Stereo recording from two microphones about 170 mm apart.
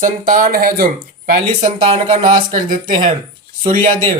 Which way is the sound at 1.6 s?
30° right (ahead or behind).